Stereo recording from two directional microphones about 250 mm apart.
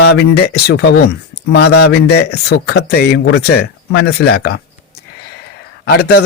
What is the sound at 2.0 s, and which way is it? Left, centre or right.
Speech, left.